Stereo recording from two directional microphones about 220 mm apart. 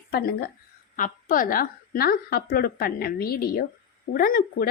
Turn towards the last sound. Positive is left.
turn(degrees=40)  # may be behind; listen again after turning